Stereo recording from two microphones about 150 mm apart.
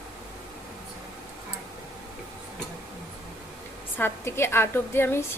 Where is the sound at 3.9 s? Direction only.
15° left (ahead or behind).